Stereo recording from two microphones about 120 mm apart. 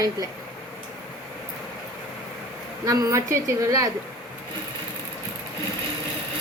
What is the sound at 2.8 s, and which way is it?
Speech, 30° right (ahead or behind).